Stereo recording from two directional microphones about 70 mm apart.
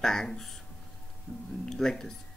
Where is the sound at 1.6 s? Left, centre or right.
Centre.